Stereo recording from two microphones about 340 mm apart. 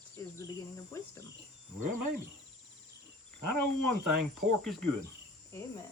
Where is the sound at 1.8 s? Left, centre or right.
Right.